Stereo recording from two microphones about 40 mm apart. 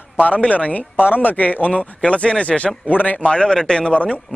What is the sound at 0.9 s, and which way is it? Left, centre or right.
A man's voice, left.